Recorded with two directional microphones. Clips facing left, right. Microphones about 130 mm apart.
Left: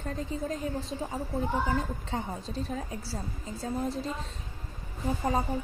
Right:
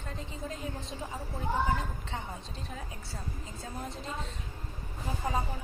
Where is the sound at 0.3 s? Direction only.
40° left (ahead or behind).